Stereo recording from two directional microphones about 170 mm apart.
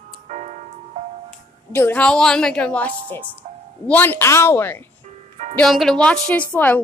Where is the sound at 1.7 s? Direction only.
10° left (ahead or behind).